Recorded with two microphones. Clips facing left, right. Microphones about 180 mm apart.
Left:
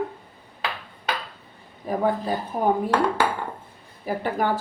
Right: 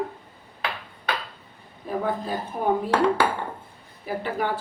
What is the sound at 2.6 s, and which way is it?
Speech, 40° left (ahead or behind).